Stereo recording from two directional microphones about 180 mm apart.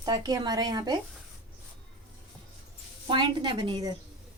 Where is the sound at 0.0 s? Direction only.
20° right (ahead or behind).